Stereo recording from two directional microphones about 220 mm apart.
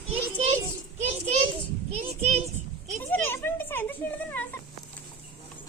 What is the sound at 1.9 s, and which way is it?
Speech, 30° right (ahead or behind).